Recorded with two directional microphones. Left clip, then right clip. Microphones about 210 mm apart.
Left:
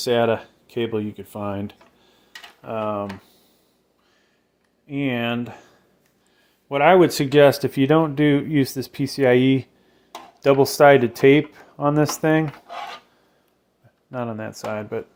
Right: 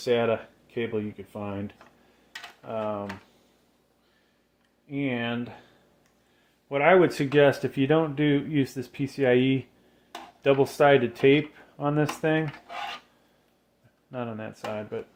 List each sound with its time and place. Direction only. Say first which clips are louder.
0.0 s speech: left 5 dB; 50° left (ahead or behind)
4.9 s speech: left 5 dB; 45° left (ahead or behind)
6.7 s speech: left 5 dB; 45° left (ahead or behind)
14.1 s speech: left 6 dB; 35° left (ahead or behind)